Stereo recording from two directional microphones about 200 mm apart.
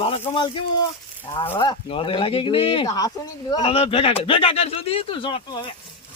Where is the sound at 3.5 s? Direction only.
30° left (ahead or behind).